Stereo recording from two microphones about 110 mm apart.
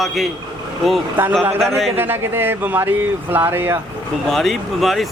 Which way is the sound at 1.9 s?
20° right (ahead or behind).